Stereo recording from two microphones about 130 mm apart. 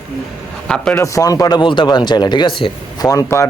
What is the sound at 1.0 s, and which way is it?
Speech, 25° left (ahead or behind).